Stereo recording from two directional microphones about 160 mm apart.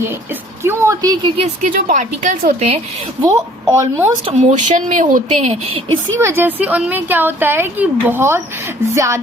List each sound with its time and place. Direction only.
0.1 s a woman's voice: 15° right (ahead or behind)
1.4 s speech: 50° right (ahead or behind)
3.2 s a woman's voice: 20° right (ahead or behind)
4.3 s speech: 45° right (ahead or behind)
6.1 s speech: 15° right (ahead or behind)